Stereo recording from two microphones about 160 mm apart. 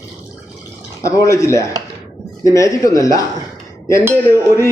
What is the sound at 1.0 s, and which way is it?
A man's voice, 20° left (ahead or behind).